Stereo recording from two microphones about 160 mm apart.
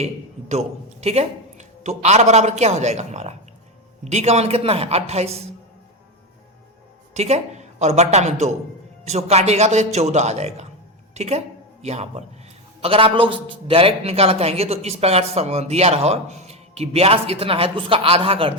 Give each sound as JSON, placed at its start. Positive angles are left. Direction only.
{"t": 0.0, "sound": "a sound", "side_deg": -40}
{"t": 1.0, "sound": "a man's voice", "side_deg": -40}
{"t": 7.1, "sound": "a woman's voice", "side_deg": -45}